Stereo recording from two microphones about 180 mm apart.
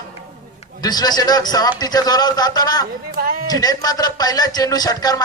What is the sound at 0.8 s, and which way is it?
A man's voice, 20° left (ahead or behind).